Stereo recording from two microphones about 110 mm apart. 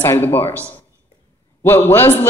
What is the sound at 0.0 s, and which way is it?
Speech, 20° left (ahead or behind).